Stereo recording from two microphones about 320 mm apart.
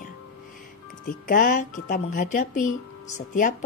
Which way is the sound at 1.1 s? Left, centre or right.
Left.